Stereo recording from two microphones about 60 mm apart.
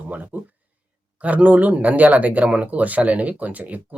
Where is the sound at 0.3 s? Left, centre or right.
Right.